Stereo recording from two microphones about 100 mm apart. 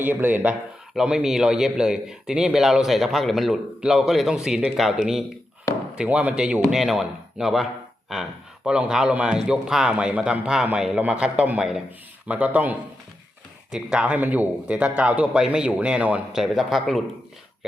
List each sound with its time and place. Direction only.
0.0 s speech: 20° right (ahead or behind)
0.9 s a man's voice: 5° right (ahead or behind)
5.7 s a sound: 30° left (ahead or behind)
6.0 s a man's voice: 15° right (ahead or behind)
16.4 s a man's voice: 5° right (ahead or behind)